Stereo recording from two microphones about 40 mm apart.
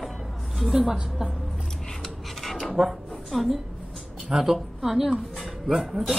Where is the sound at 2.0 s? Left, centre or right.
Centre.